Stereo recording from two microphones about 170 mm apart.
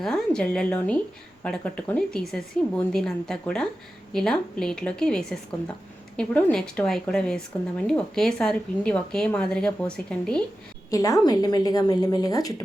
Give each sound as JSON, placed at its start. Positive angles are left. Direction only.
{"t": 0.0, "sound": "speech", "side_deg": 5}
{"t": 10.9, "sound": "a woman's voice", "side_deg": 20}